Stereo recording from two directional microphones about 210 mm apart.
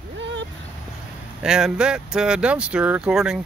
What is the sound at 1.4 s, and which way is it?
Speech, 5° right (ahead or behind).